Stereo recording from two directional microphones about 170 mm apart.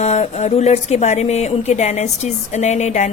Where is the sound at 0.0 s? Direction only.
40° left (ahead or behind).